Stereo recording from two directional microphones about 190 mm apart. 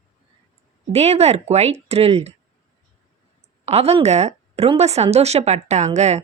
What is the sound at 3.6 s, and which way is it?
Speech, 35° right (ahead or behind).